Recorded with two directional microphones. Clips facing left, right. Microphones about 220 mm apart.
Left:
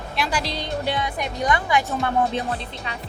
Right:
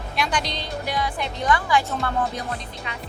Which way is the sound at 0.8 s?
25° left (ahead or behind).